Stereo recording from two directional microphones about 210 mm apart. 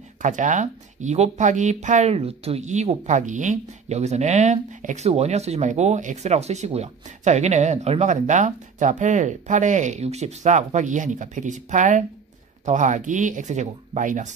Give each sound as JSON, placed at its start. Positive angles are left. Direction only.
{"t": 0.2, "sound": "speech", "side_deg": -35}